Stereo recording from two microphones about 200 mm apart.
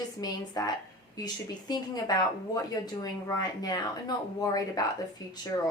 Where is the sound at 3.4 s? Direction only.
20° left (ahead or behind).